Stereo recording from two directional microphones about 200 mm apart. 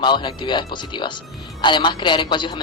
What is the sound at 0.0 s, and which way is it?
Speech, 20° left (ahead or behind).